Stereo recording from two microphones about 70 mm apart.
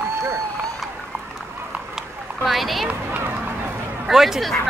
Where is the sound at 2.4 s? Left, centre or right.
Centre.